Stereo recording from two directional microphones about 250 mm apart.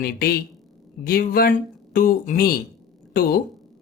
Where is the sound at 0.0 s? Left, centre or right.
Left.